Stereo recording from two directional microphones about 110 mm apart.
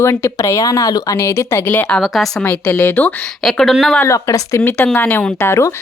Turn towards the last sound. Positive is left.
turn(degrees=25)  # may be behind; listen again after turning